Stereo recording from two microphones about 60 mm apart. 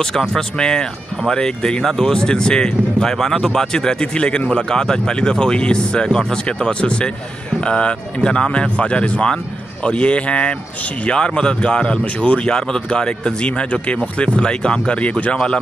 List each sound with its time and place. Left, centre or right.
0.0 s speech: centre